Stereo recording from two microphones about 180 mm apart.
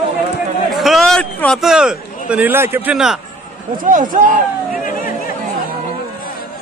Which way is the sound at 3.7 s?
50° right (ahead or behind).